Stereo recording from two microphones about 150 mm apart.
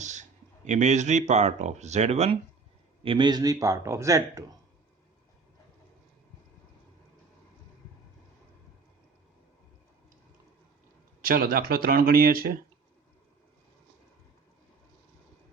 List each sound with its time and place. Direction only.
0.0 s speech: 50° right (ahead or behind)
3.0 s speech: 35° right (ahead or behind)
11.2 s speech: 70° right (ahead or behind)